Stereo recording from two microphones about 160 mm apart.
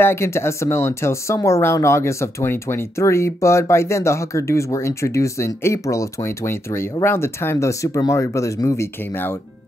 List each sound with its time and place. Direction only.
0.0 s speech: 15° left (ahead or behind)